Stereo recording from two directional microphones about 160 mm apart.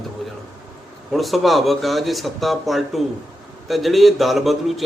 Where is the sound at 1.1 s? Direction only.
Centre (ahead or behind).